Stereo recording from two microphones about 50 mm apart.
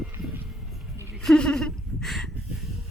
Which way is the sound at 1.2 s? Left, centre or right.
Centre.